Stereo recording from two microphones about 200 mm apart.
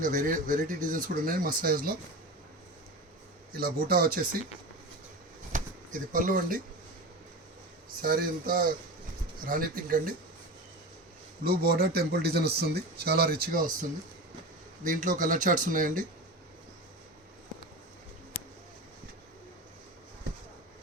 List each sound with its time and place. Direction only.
0.0 s speech: 40° right (ahead or behind)
3.5 s speech: 50° right (ahead or behind)
5.5 s a sound: 40° right (ahead or behind)
8.0 s speech: 50° right (ahead or behind)
11.4 s speech: 50° right (ahead or behind)
14.8 s speech: 40° right (ahead or behind)